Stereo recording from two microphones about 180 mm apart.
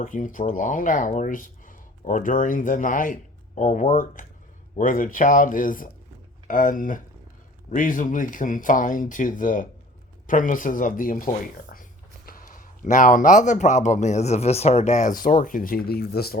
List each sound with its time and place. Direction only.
0.0 s speech: 45° left (ahead or behind)